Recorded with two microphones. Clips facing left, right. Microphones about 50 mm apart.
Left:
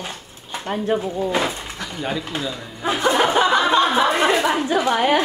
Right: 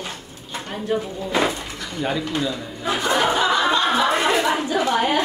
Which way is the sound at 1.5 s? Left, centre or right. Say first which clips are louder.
Even; centre.